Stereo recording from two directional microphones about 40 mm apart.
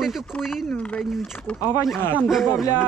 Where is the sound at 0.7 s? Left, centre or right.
Left.